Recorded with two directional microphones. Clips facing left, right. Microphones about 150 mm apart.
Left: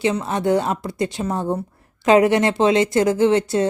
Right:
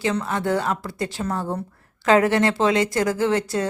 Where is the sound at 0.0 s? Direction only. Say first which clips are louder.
Left 3 dB; 20° left (ahead or behind).